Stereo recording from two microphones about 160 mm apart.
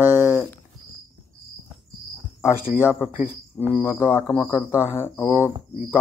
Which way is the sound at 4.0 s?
10° left (ahead or behind).